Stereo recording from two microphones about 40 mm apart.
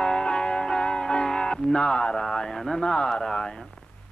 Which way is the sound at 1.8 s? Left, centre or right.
Left.